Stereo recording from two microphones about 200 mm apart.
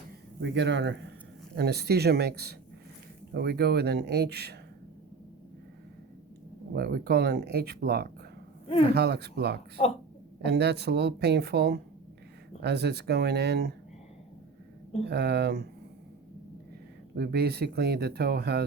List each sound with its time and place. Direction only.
0.4 s speech: 60° right (ahead or behind)
6.7 s speech: 50° right (ahead or behind)
9.8 s speech: 35° left (ahead or behind)
10.4 s speech: 55° right (ahead or behind)
15.0 s speech: 55° right (ahead or behind)
17.2 s speech: 55° right (ahead or behind)